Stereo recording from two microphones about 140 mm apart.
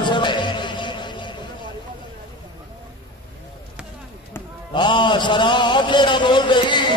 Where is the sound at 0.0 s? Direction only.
35° left (ahead or behind).